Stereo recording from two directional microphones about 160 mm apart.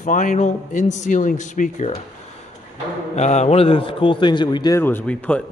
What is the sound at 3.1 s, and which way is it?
A man's voice, 45° left (ahead or behind).